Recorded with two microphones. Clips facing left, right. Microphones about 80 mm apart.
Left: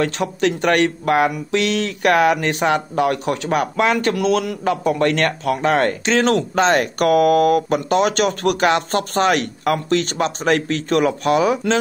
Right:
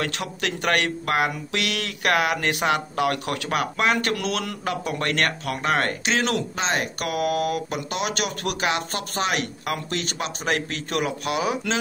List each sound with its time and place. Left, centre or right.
0.0 s speech: left